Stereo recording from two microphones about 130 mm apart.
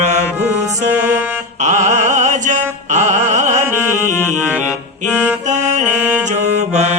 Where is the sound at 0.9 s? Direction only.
15° right (ahead or behind).